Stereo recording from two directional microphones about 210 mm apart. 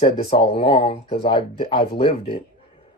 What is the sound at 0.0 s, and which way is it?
Speech, 25° left (ahead or behind).